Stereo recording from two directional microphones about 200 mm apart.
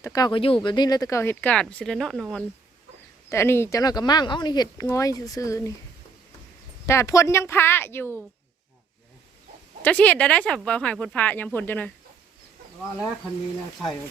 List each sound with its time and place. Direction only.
0.0 s speech: 15° left (ahead or behind); by 2.4 s centre (ahead or behind)
3.2 s speech: 15° left (ahead or behind)
6.8 s speech: 15° left (ahead or behind)
9.8 s speech: 5° left (ahead or behind)